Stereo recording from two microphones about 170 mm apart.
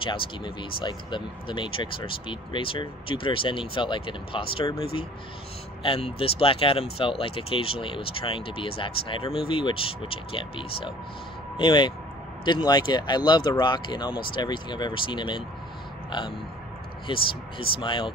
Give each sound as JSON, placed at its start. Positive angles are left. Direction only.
{"t": 0.0, "sound": "speech", "side_deg": 30}